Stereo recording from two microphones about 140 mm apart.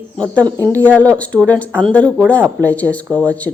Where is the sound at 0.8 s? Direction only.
10° left (ahead or behind).